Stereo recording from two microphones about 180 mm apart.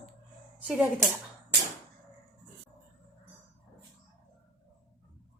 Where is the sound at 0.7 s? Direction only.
10° right (ahead or behind).